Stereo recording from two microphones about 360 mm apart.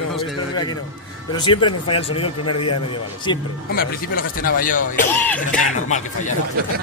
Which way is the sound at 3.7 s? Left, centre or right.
Left.